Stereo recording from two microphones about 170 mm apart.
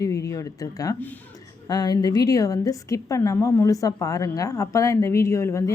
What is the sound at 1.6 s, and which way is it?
A woman's voice, 25° left (ahead or behind).